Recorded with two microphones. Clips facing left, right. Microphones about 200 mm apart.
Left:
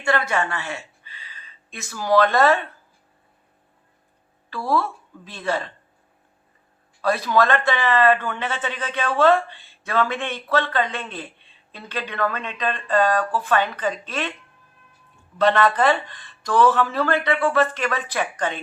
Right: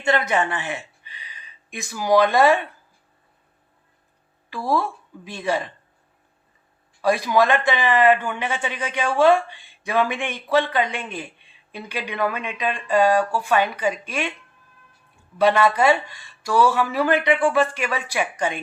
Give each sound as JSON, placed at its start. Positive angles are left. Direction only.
{"t": 0.0, "sound": "speech", "side_deg": -20}
{"t": 4.4, "sound": "a woman's voice", "side_deg": -15}
{"t": 7.0, "sound": "speech", "side_deg": -15}
{"t": 15.4, "sound": "speech", "side_deg": -10}